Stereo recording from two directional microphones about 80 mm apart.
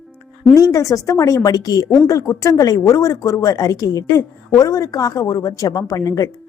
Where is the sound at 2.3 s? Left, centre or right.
Left.